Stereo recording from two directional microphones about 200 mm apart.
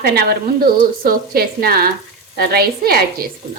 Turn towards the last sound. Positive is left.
turn(degrees=-50)  # may be behind; listen again after turning